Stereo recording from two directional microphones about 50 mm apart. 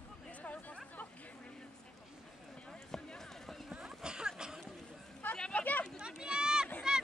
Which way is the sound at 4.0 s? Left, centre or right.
Centre.